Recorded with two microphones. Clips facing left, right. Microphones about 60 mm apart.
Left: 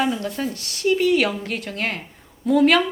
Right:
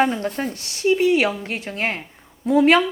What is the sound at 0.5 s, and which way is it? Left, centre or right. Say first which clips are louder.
A woman's voice: right 2 dB; right.